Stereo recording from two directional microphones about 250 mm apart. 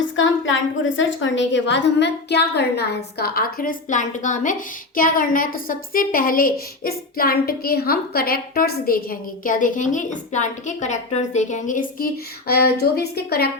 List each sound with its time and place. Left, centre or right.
0.2 s a woman's voice: left